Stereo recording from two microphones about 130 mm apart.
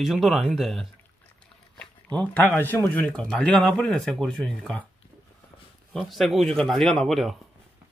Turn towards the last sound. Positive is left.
turn(degrees=0)  # may be behind; listen again after turning